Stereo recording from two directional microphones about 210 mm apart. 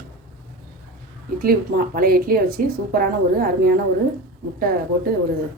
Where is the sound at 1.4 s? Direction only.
45° right (ahead or behind).